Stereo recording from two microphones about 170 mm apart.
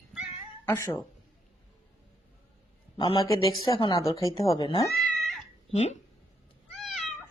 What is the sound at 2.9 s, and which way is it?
Speech, 30° left (ahead or behind).